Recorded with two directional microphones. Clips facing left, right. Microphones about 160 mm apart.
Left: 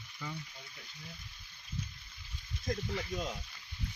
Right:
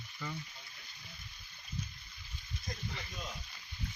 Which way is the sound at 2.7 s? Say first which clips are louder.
Left 10 dB; 90° left.